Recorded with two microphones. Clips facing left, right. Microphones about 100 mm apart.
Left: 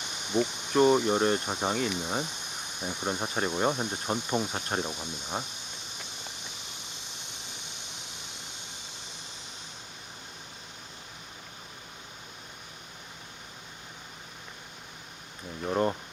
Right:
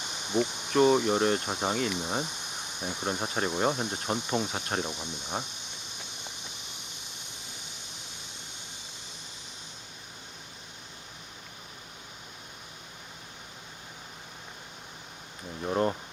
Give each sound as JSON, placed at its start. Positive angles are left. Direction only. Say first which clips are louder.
{"t": 0.3, "sound": "speech", "louder": "even", "side_deg": -25}
{"t": 0.8, "sound": "cricket", "louder": "even", "side_deg": 0}
{"t": 2.0, "sound": "speech", "louder": "even", "side_deg": -10}
{"t": 2.8, "sound": "cricket", "louder": "even", "side_deg": 0}
{"t": 15.6, "sound": "a sound", "louder": "even", "side_deg": 0}